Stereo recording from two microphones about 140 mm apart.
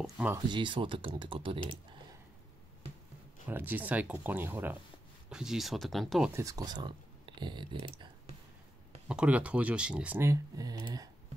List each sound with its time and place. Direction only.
0.5 s speech: 35° right (ahead or behind)
3.4 s speech: 10° right (ahead or behind)
5.3 s speech: 5° right (ahead or behind)
6.3 s speech: 25° right (ahead or behind)
9.0 s speech: 10° right (ahead or behind); by 11.1 s 25° right (ahead or behind)